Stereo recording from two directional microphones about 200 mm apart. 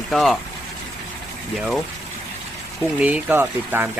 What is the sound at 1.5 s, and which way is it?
Speech, centre (ahead or behind).